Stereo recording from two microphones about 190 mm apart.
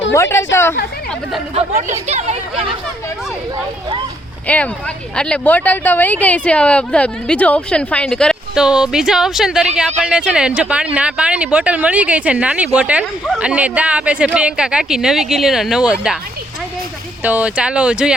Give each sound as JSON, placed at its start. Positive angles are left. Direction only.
{"t": 0.1, "sound": "speech", "side_deg": 15}
{"t": 1.5, "sound": "speech", "side_deg": -35}
{"t": 4.4, "sound": "speech", "side_deg": 5}
{"t": 17.2, "sound": "speech", "side_deg": -5}